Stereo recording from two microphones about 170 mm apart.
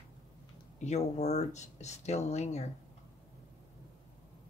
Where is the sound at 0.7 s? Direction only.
40° left (ahead or behind).